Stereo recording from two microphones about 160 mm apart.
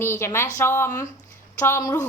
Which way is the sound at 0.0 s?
15° left (ahead or behind).